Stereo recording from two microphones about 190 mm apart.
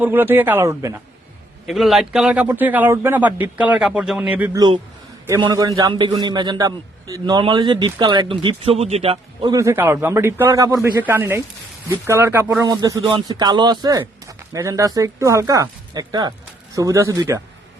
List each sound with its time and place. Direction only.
0.0 s speech: 10° right (ahead or behind)
1.6 s speech: centre (ahead or behind)
5.4 s a man's voice: 20° right (ahead or behind)
9.5 s speech: 15° right (ahead or behind)